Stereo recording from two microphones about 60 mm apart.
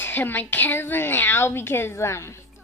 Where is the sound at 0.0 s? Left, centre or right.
Left.